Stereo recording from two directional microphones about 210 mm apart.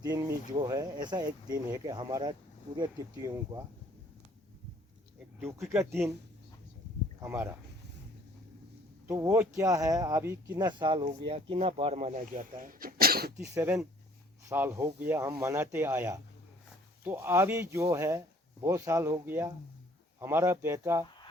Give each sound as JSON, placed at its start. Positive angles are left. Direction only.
{"t": 0.0, "sound": "speech", "side_deg": -15}
{"t": 5.6, "sound": "speech", "side_deg": -15}
{"t": 7.2, "sound": "speech", "side_deg": -15}
{"t": 9.0, "sound": "speech", "side_deg": -15}
{"t": 13.4, "sound": "speech", "side_deg": -15}